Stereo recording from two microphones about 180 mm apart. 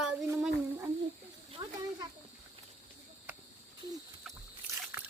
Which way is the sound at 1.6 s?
25° right (ahead or behind).